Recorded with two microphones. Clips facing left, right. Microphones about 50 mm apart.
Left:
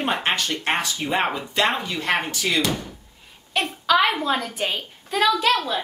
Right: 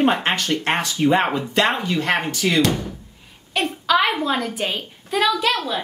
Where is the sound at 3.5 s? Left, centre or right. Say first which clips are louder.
Right 1 dB; centre.